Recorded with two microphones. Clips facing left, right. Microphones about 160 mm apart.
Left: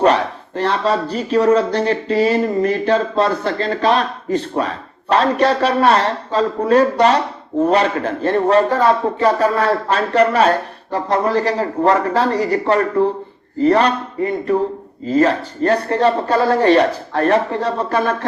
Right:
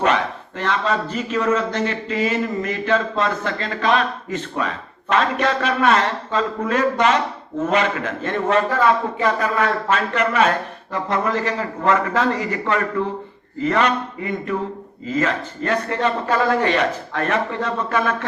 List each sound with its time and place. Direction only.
0.0 s speech: 35° left (ahead or behind)